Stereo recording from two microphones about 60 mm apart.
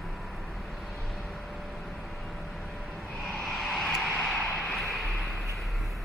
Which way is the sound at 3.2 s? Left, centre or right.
Centre.